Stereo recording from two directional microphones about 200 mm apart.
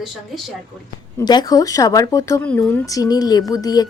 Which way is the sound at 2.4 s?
5° left (ahead or behind).